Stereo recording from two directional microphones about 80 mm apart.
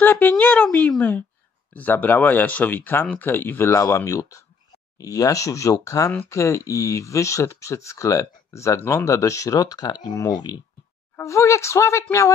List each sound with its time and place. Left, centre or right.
0.0 s a sound: left
1.7 s speech: left
11.1 s speech: left